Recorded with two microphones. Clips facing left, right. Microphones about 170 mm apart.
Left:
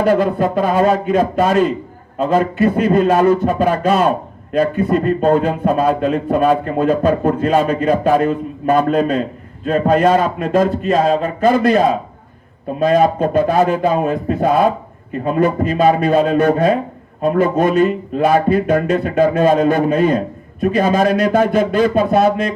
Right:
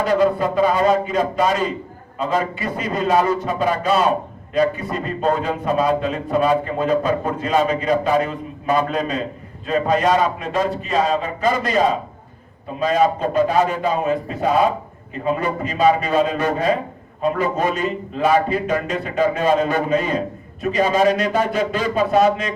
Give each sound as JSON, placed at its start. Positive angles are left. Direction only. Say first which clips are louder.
{"t": 0.1, "sound": "speech", "louder": "left 2 dB", "side_deg": 50}
{"t": 2.2, "sound": "a man's voice", "louder": "left 7 dB", "side_deg": 55}
{"t": 12.8, "sound": "speech", "louder": "left 4 dB", "side_deg": 50}